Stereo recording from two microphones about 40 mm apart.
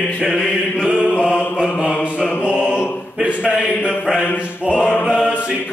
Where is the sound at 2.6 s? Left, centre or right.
Right.